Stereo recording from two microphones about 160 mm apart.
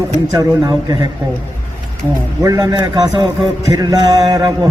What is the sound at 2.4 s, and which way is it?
A man's voice, 20° right (ahead or behind).